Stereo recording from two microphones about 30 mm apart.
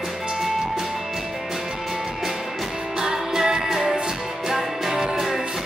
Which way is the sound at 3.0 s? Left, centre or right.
Right.